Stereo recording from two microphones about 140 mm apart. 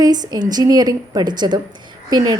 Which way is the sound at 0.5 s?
30° right (ahead or behind).